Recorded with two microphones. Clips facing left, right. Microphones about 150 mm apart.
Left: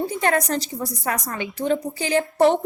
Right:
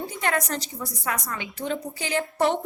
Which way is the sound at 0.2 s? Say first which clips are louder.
Left 3 dB; 35° left (ahead or behind).